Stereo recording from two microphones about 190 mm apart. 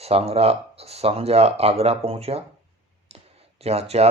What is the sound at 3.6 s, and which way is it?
Speech, 35° right (ahead or behind).